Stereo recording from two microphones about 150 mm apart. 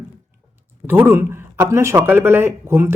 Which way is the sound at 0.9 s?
15° right (ahead or behind).